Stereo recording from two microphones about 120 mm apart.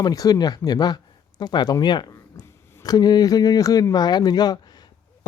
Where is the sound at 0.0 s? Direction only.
30° left (ahead or behind).